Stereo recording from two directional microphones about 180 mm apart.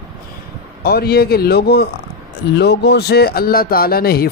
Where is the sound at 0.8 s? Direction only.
60° left (ahead or behind).